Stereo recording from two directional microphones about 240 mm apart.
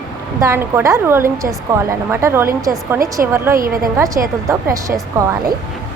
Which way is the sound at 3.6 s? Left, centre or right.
Right.